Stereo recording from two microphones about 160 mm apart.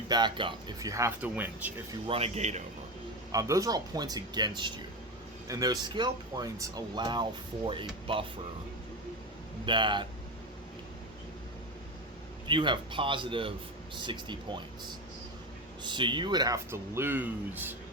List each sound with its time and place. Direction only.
0.1 s speech: 30° right (ahead or behind); by 1.7 s 10° right (ahead or behind)
2.0 s speech: 40° right (ahead or behind)
3.3 s speech: 20° right (ahead or behind)
9.6 s speech: 30° right (ahead or behind)
12.5 s speech: 30° right (ahead or behind)
15.8 s speech: 30° right (ahead or behind); by 17.7 s 10° right (ahead or behind)